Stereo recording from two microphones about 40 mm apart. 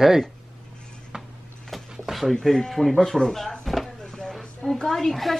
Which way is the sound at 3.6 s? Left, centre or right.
Centre.